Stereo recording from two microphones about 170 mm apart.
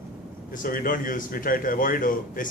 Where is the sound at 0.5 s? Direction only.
55° left (ahead or behind).